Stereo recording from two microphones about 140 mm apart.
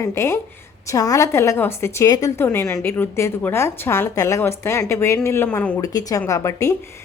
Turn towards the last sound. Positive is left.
turn(degrees=20)  # may be behind; listen again after turning